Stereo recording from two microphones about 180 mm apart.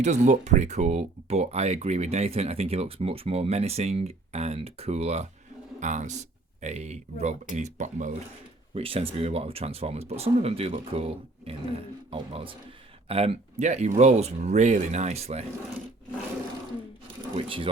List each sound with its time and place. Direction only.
0.0 s speech: 40° right (ahead or behind)
8.7 s speech: 30° right (ahead or behind)
17.3 s speech: 30° right (ahead or behind)